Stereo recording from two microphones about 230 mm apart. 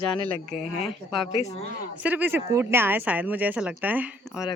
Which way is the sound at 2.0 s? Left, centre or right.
Centre.